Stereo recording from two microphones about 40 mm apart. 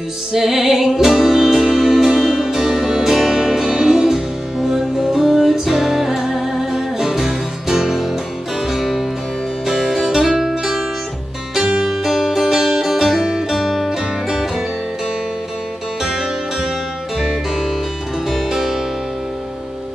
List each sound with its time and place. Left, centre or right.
0.3 s music: centre
11.8 s music: centre
16.0 s music: centre
18.3 s music: centre